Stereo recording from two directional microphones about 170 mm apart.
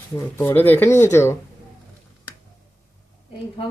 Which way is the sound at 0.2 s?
15° left (ahead or behind).